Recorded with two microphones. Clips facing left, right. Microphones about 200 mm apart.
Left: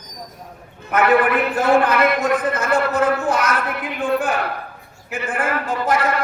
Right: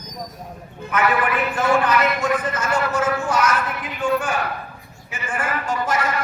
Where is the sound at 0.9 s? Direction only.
55° left (ahead or behind).